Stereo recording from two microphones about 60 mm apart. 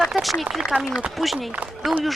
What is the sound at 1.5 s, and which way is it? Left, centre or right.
Speech, right.